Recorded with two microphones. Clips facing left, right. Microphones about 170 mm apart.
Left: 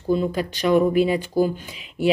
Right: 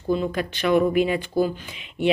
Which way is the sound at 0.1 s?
40° left (ahead or behind).